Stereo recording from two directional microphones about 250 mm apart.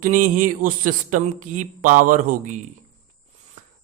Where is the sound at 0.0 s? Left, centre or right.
Right.